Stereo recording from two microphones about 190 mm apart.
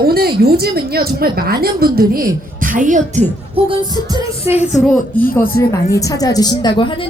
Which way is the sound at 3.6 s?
20° right (ahead or behind).